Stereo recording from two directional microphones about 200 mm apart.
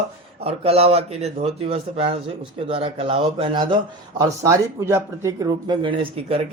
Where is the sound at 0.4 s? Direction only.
30° right (ahead or behind).